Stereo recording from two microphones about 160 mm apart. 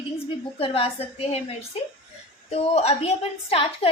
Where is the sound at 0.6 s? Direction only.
35° left (ahead or behind).